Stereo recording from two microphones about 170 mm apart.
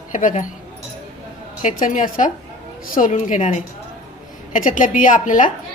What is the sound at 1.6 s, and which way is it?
A woman's voice, 50° left (ahead or behind).